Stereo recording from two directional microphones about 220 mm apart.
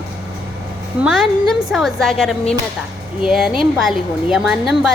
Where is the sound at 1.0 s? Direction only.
Centre (ahead or behind).